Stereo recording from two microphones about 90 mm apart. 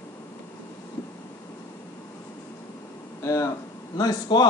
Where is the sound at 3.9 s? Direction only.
50° left (ahead or behind).